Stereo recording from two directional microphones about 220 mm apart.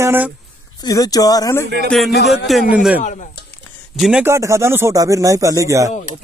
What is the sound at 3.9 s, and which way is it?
Speech, centre (ahead or behind).